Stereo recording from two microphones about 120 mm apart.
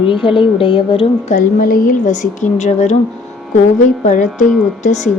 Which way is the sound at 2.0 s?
90° left.